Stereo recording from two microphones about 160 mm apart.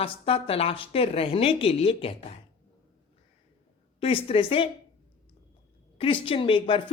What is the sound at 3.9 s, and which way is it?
Speech, 35° left (ahead or behind).